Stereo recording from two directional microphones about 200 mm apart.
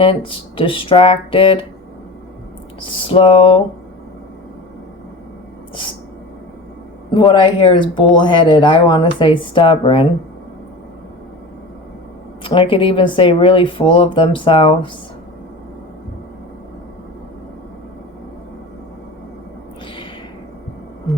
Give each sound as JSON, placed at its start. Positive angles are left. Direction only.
{"t": 0.0, "sound": "speech", "side_deg": 25}
{"t": 2.8, "sound": "speech", "side_deg": 25}
{"t": 7.1, "sound": "speech", "side_deg": 20}
{"t": 12.4, "sound": "speech", "side_deg": 25}